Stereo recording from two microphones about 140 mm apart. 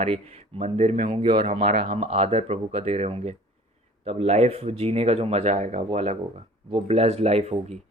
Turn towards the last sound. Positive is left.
turn(degrees=-50)  # may be behind; listen again after turning